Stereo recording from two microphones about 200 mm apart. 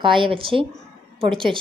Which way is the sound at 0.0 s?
25° right (ahead or behind).